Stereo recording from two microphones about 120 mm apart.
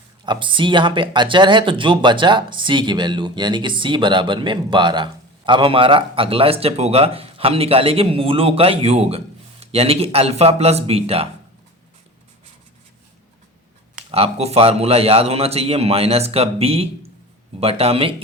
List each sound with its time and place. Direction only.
0.3 s speech: 45° right (ahead or behind)
14.1 s a man's voice: 55° right (ahead or behind)